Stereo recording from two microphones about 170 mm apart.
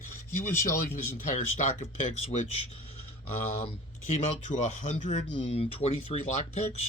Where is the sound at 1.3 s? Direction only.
45° left (ahead or behind).